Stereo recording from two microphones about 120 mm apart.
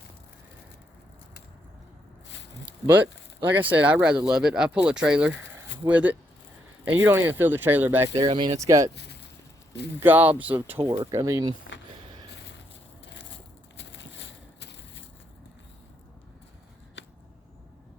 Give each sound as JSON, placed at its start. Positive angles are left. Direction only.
{"t": 3.4, "sound": "speech", "side_deg": -15}
{"t": 5.5, "sound": "a sound", "side_deg": -15}
{"t": 6.8, "sound": "speech", "side_deg": -15}
{"t": 8.1, "sound": "speech", "side_deg": -45}
{"t": 8.6, "sound": "speech", "side_deg": -25}
{"t": 10.0, "sound": "speech", "side_deg": -15}
{"t": 10.8, "sound": "speech", "side_deg": -40}
{"t": 11.1, "sound": "speech", "side_deg": -25}